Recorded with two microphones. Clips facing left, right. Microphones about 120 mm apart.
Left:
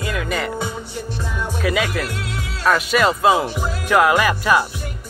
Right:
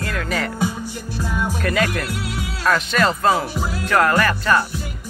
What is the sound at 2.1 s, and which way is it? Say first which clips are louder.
Music: right 1 dB; 5° right (ahead or behind).